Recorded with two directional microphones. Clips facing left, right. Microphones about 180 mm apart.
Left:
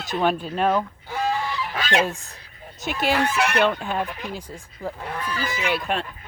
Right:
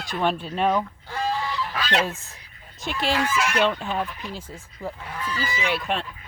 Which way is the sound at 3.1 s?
65° left (ahead or behind).